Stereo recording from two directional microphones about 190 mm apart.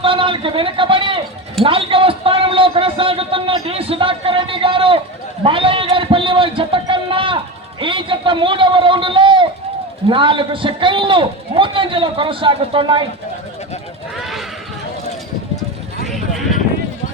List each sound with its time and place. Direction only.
0.0 s speech: 25° right (ahead or behind)
1.6 s a sound: 30° right (ahead or behind)
10.1 s a man's voice: 25° right (ahead or behind)
16.0 s vehicle: centre (ahead or behind)